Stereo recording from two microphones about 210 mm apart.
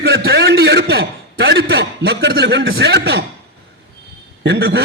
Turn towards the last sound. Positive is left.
turn(degrees=-55)  # may be behind; listen again after turning